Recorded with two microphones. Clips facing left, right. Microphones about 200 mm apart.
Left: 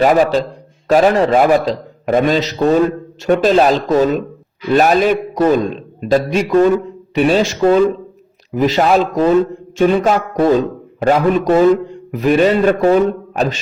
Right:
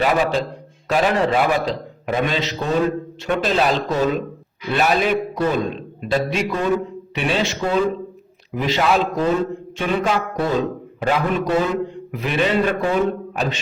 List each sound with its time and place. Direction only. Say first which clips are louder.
0.0 s a man's voice: left 7 dB; 45° left (ahead or behind)